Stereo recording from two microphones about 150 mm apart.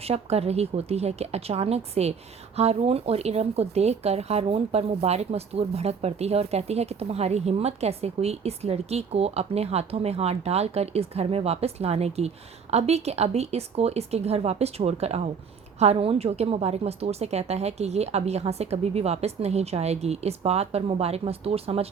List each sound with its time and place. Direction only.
0.0 s speech: 45° right (ahead or behind)